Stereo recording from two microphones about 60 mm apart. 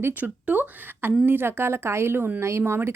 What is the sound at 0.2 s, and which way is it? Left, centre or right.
A woman's voice, right.